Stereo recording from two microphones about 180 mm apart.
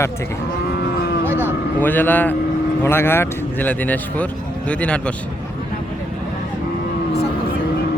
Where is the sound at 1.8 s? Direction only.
10° left (ahead or behind).